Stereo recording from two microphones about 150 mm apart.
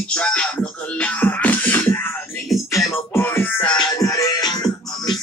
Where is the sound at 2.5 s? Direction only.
Centre (ahead or behind).